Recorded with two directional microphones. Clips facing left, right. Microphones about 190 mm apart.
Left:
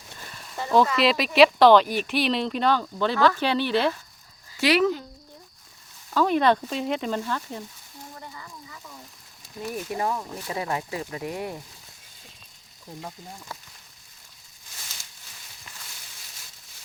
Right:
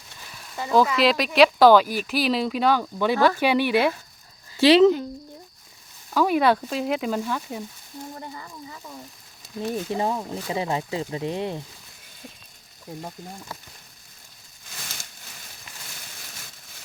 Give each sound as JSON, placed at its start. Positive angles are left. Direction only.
{"t": 0.3, "sound": "speech", "side_deg": -5}
{"t": 4.5, "sound": "speech", "side_deg": -25}
{"t": 6.1, "sound": "speech", "side_deg": -10}
{"t": 9.6, "sound": "speech", "side_deg": -25}
{"t": 14.7, "sound": "a sound", "side_deg": -80}
{"t": 16.0, "sound": "a sound", "side_deg": -55}